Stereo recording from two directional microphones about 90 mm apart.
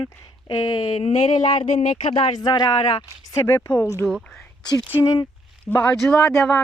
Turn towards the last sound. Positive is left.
turn(degrees=5)  # may be behind; listen again after turning